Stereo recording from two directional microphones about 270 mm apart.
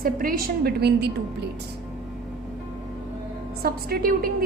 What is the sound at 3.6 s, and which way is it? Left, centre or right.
Speech, right.